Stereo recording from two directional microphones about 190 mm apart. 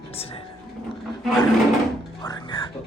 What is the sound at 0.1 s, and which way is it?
Speech, 30° left (ahead or behind).